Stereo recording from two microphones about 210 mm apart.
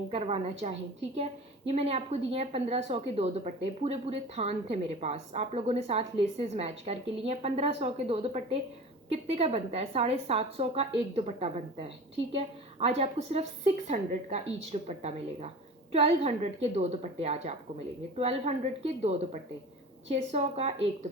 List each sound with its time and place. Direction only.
0.1 s a woman's voice: 25° right (ahead or behind)